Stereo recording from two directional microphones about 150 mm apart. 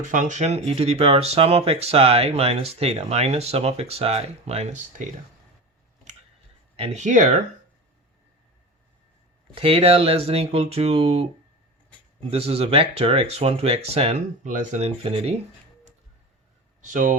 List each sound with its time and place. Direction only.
0.1 s speech: 55° right (ahead or behind)
6.7 s speech: 45° right (ahead or behind)
9.5 s speech: 40° right (ahead or behind)
12.3 s speech: 45° right (ahead or behind)
14.4 s speech: 55° right (ahead or behind)
16.8 s speech: 60° right (ahead or behind)